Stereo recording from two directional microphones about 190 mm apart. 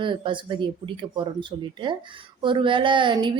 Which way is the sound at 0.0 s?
25° right (ahead or behind).